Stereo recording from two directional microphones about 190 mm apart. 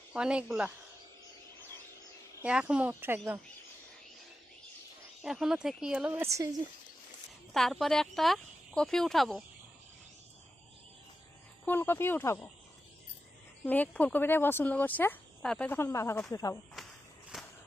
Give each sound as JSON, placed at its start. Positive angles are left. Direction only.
{"t": 0.1, "sound": "speech", "side_deg": -5}
{"t": 2.4, "sound": "speech", "side_deg": -5}
{"t": 5.2, "sound": "speech", "side_deg": 0}
{"t": 7.5, "sound": "speech", "side_deg": 0}
{"t": 11.6, "sound": "speech", "side_deg": 10}
{"t": 13.7, "sound": "speech", "side_deg": 10}
{"t": 16.8, "sound": "walk", "side_deg": 0}
{"t": 17.3, "sound": "a sound", "side_deg": -5}